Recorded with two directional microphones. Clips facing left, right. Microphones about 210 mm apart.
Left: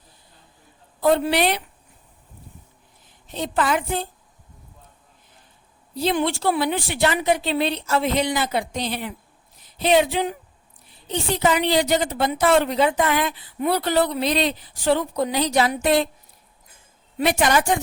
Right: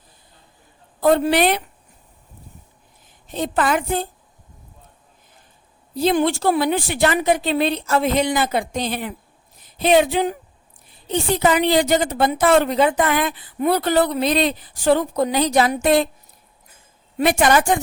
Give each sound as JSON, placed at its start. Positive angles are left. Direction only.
{"t": 1.0, "sound": "a woman's voice", "side_deg": -50}
{"t": 3.3, "sound": "a woman's voice", "side_deg": -50}
{"t": 5.9, "sound": "a woman's voice", "side_deg": -45}
{"t": 17.2, "sound": "a woman's voice", "side_deg": -50}